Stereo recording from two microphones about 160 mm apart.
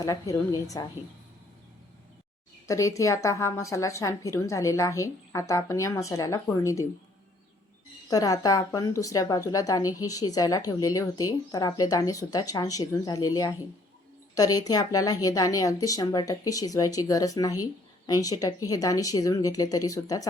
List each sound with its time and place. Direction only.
0.0 s a woman's voice: 20° left (ahead or behind)
2.6 s a woman's voice: 20° left (ahead or behind)
8.1 s a woman's voice: 20° left (ahead or behind)